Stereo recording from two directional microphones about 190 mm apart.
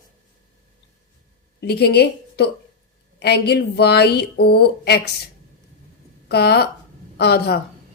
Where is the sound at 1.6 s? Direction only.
60° left (ahead or behind).